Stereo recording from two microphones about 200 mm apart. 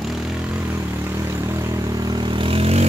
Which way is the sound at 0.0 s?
Centre (ahead or behind).